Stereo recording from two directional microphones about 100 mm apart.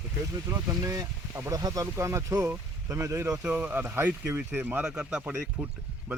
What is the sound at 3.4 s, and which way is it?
Speech, 20° right (ahead or behind).